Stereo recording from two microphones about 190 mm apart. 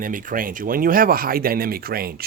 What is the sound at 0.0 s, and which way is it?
Speech, 45° right (ahead or behind).